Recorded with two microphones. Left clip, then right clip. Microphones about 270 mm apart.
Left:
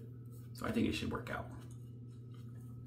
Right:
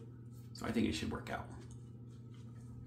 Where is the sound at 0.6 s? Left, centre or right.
Centre.